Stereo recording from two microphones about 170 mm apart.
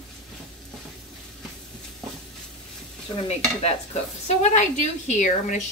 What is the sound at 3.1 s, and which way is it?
Stir, 35° left (ahead or behind).